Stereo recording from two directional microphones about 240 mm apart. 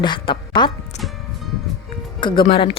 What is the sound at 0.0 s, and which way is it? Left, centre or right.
Speech, centre.